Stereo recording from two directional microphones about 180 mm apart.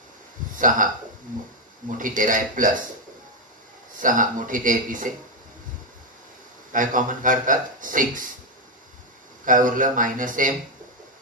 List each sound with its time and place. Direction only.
0.6 s speech: 45° right (ahead or behind)
1.9 s a man's voice: 50° right (ahead or behind)
4.0 s a man's voice: 45° right (ahead or behind)
6.7 s a man's voice: 45° right (ahead or behind)
9.4 s a man's voice: 45° right (ahead or behind)